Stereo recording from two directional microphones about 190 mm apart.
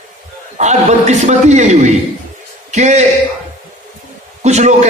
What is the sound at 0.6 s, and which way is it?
A man's voice, 35° right (ahead or behind).